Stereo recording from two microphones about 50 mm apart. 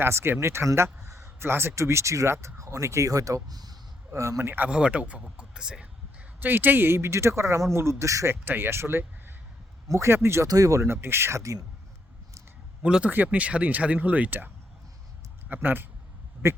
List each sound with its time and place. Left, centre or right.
0.0 s speech: right
1.2 s a sound: right
1.7 s speech: right
4.4 s speech: right
4.7 s speech: right
6.4 s speech: right
8.4 s speech: right
9.9 s speech: right
12.8 s speech: right
13.2 s speech: right